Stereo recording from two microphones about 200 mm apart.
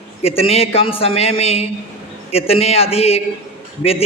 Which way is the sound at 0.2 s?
30° left (ahead or behind).